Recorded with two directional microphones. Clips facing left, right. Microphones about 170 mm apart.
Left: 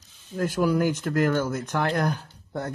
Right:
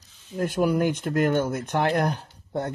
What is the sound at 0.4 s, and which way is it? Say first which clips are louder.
Speech: even; 20° right (ahead or behind).